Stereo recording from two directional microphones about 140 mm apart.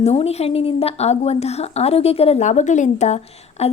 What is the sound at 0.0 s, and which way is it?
A woman's voice, 50° left (ahead or behind).